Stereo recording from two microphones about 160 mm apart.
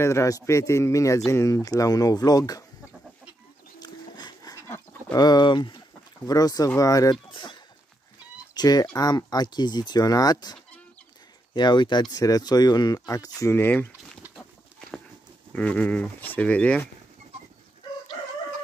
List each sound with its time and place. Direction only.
0.0 s speech: 20° left (ahead or behind)
3.8 s dog: 25° left (ahead or behind)
4.6 s livestock: 20° left (ahead or behind)
6.2 s speech: 25° left (ahead or behind)
8.5 s speech: 25° left (ahead or behind)
14.3 s livestock: centre (ahead or behind)
15.5 s speech: 10° left (ahead or behind)